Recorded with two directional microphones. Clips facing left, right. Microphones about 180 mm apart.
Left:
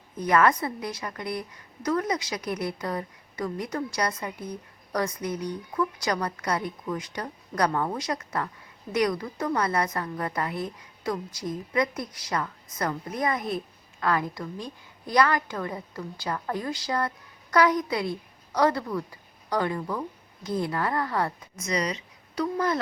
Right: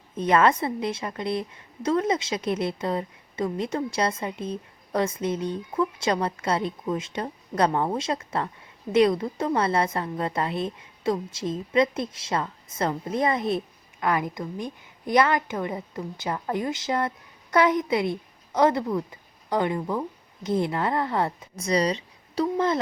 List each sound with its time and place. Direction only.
0.2 s a woman's voice: 25° right (ahead or behind)